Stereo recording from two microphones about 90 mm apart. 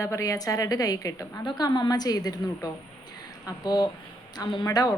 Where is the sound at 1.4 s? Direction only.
55° left (ahead or behind).